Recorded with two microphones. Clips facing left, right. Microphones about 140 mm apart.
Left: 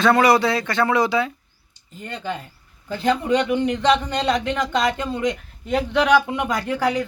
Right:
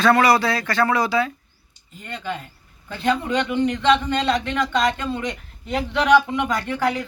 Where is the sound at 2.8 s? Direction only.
15° left (ahead or behind).